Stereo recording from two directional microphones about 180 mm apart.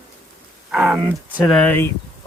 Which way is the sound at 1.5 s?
10° left (ahead or behind).